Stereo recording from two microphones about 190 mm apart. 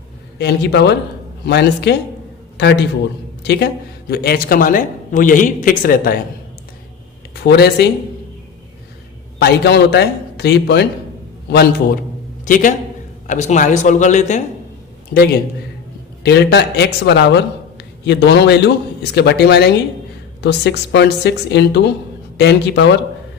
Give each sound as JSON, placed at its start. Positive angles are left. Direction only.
{"t": 0.3, "sound": "a woman's voice", "side_deg": 60}
{"t": 7.3, "sound": "a woman's voice", "side_deg": 60}
{"t": 9.4, "sound": "a woman's voice", "side_deg": 60}
{"t": 12.5, "sound": "speech", "side_deg": 45}
{"t": 15.1, "sound": "a woman's voice", "side_deg": 55}